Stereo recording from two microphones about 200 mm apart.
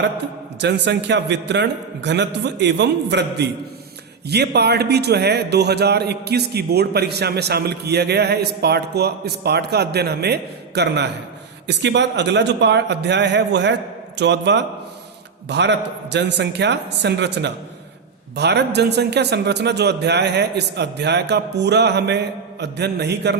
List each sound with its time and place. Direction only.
0.6 s a man's voice: 60° right (ahead or behind)